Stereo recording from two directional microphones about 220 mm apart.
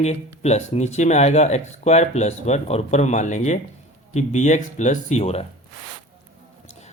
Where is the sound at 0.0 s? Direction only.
30° left (ahead or behind).